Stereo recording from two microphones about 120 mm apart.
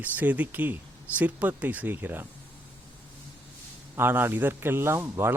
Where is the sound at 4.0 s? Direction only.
15° right (ahead or behind).